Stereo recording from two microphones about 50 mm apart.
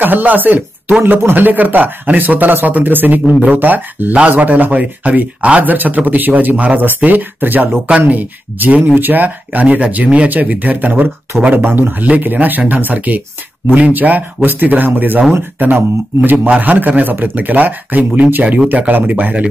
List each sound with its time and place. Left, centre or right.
0.0 s speech: right
3.3 s speech: centre
3.5 s speech: right